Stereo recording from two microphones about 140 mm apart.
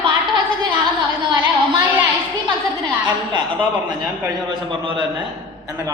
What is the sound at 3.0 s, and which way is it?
Speech, 35° right (ahead or behind).